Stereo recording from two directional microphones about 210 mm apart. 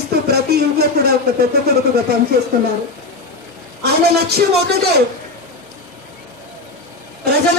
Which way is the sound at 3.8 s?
50° right (ahead or behind).